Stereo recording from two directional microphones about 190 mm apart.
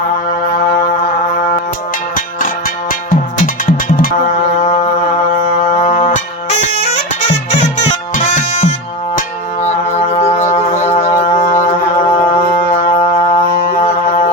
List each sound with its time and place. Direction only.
1.4 s music: 45° left (ahead or behind)
3.4 s music: 45° left (ahead or behind)
5.4 s music: 40° left (ahead or behind)
8.1 s music: 40° left (ahead or behind)
9.9 s music: 35° left (ahead or behind)